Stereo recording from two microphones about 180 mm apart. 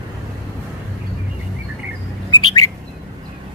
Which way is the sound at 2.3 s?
20° left (ahead or behind).